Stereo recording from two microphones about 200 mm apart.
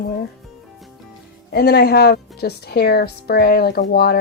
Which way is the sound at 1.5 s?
55° left (ahead or behind).